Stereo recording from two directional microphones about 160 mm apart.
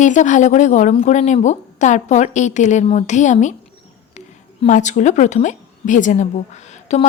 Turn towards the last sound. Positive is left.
turn(degrees=45)  # may be behind; listen again after turning